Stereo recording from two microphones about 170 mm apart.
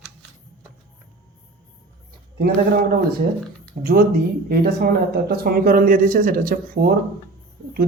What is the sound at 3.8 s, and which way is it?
Speech, 60° right (ahead or behind).